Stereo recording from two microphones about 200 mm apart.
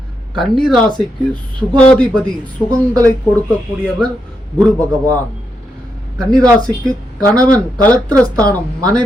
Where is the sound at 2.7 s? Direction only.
15° right (ahead or behind).